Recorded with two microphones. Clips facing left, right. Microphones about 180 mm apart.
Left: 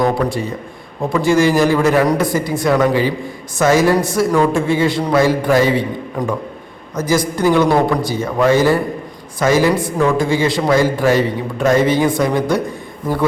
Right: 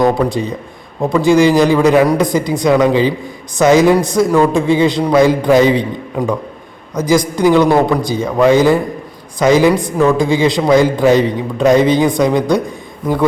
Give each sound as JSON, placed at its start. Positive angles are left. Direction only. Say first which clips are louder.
{"t": 0.0, "sound": "a man's voice", "louder": "right 3 dB", "side_deg": -20}
{"t": 6.9, "sound": "a man's voice", "louder": "right 3 dB", "side_deg": -15}